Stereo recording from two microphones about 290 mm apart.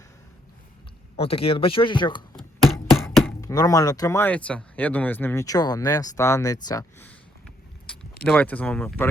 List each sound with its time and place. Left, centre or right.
1.1 s speech: centre
2.6 s chopping: centre
3.4 s speech: centre
8.3 s speech: centre